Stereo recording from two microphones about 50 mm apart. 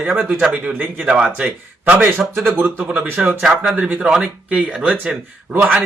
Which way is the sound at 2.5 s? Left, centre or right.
Right.